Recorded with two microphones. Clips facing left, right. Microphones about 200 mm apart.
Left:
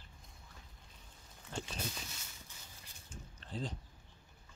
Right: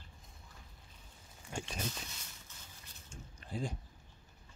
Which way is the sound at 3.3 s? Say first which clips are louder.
Right 2 dB; 10° right (ahead or behind).